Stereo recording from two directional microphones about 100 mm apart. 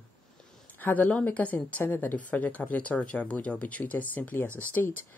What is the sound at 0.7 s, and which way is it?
A woman's voice, 15° left (ahead or behind).